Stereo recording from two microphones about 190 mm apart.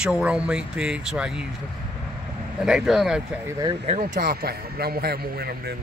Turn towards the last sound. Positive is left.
turn(degrees=-55)  # may be behind; listen again after turning